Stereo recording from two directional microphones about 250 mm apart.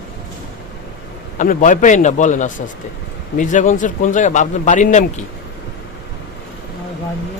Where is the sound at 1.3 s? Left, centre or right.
Left.